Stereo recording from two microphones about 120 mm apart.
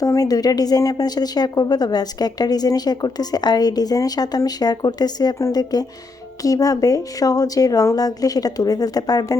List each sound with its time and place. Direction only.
0.0 s a woman's voice: 30° left (ahead or behind)